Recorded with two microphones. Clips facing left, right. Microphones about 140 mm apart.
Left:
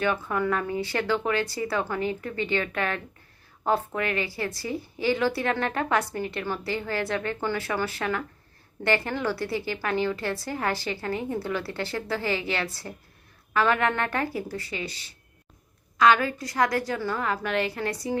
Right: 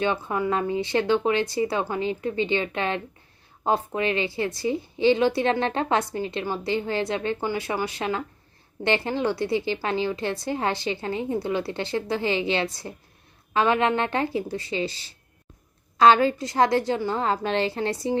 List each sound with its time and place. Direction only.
0.0 s a woman's voice: 20° right (ahead or behind)